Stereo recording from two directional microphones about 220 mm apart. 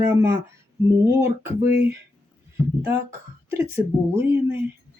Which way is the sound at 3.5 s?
10° right (ahead or behind).